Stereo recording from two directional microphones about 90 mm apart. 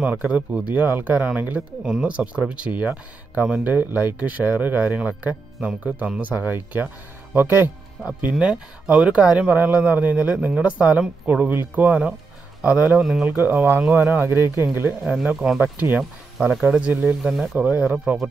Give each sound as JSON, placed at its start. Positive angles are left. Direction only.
{"t": 0.0, "sound": "speech", "side_deg": -15}
{"t": 8.2, "sound": "speech", "side_deg": -10}
{"t": 13.0, "sound": "speech", "side_deg": -5}
{"t": 13.4, "sound": "speech", "side_deg": -25}
{"t": 15.3, "sound": "speech", "side_deg": -5}
{"t": 15.6, "sound": "speech", "side_deg": -20}
{"t": 16.0, "sound": "speech", "side_deg": 0}
{"t": 16.6, "sound": "speech", "side_deg": -15}
{"t": 17.2, "sound": "speech", "side_deg": -5}
{"t": 17.6, "sound": "speech", "side_deg": -15}